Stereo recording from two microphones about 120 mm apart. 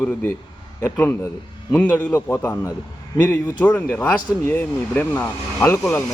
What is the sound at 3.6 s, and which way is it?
A man's voice, 15° left (ahead or behind).